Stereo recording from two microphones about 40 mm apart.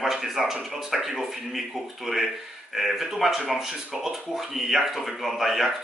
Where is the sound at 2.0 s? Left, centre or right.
Centre.